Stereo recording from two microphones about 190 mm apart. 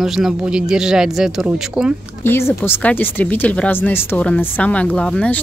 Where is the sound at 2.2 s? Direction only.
10° left (ahead or behind).